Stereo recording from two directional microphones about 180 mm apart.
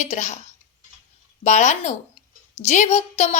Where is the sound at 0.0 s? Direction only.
40° left (ahead or behind).